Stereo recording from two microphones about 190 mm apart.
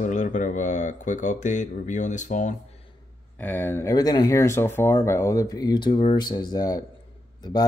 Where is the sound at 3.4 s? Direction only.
10° left (ahead or behind).